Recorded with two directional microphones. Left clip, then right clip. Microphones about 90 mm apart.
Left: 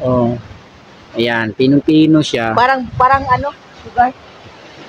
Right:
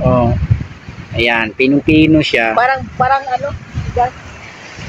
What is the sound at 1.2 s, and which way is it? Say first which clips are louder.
Speech: right 2 dB; 15° left (ahead or behind).